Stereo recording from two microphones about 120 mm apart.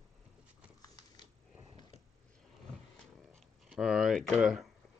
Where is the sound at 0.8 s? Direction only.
35° left (ahead or behind).